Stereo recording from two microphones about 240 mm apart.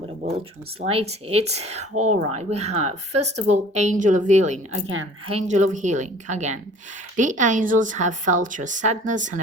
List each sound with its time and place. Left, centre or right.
0.8 s a woman's voice: right